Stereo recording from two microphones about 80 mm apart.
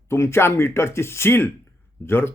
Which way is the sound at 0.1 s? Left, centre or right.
Left.